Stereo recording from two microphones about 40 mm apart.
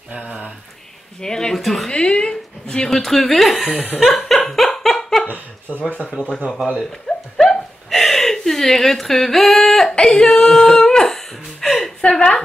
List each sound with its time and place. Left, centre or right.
0.1 s a sound: right
1.2 s speech: centre
1.6 s a woman's voice: centre
1.9 s speech: centre
4.0 s laughter: centre
5.7 s speech: left
6.8 s a sound: centre